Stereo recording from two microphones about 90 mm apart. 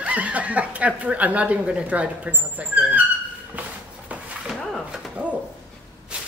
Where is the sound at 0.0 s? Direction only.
15° right (ahead or behind).